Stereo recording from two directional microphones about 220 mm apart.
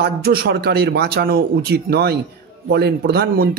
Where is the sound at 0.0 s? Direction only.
45° right (ahead or behind).